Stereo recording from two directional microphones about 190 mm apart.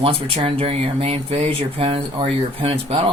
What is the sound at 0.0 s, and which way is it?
Speech, 30° right (ahead or behind).